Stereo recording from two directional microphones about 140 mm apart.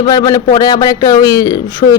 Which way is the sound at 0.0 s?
25° left (ahead or behind).